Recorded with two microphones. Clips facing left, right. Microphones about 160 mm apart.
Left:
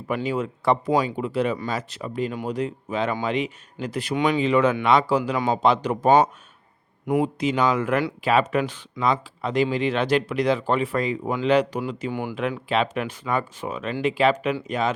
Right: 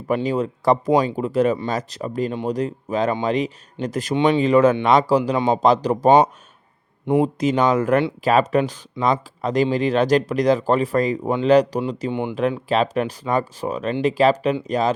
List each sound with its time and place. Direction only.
0.1 s speech: 35° right (ahead or behind)
4.1 s speech: 25° right (ahead or behind)
4.4 s speech: 45° right (ahead or behind)
7.0 s speech: 25° right (ahead or behind)
7.3 s speech: 45° right (ahead or behind)